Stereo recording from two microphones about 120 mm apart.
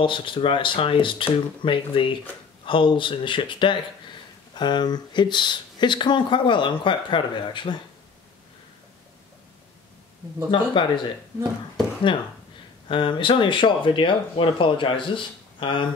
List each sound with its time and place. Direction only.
0.0 s speech: 45° left (ahead or behind)
10.5 s speech: 40° left (ahead or behind)
12.8 s speech: 45° left (ahead or behind)